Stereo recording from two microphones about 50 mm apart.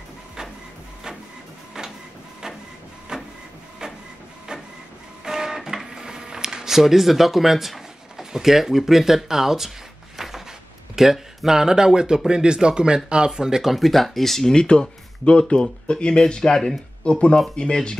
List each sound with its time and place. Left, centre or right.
1.8 s printer: centre
3.1 s printer: centre
5.2 s guitar: centre
10.1 s a sound: centre
11.0 s speech: centre
14.5 s speech: centre